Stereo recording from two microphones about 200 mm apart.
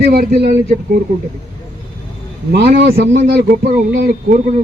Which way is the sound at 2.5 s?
50° right (ahead or behind).